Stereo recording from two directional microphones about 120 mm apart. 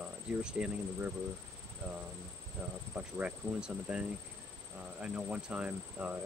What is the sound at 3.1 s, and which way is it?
Speech, 10° right (ahead or behind).